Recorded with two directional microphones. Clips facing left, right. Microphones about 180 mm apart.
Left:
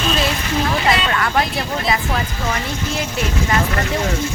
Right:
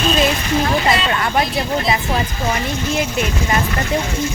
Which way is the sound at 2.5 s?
15° right (ahead or behind).